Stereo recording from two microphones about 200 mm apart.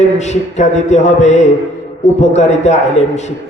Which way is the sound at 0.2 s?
35° left (ahead or behind).